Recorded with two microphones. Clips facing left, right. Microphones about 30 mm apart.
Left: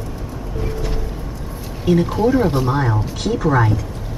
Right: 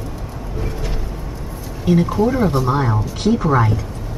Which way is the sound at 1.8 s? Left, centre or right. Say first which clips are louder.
Even; centre.